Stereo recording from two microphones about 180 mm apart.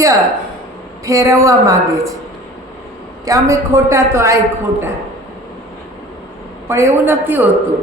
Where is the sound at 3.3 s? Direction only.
15° right (ahead or behind).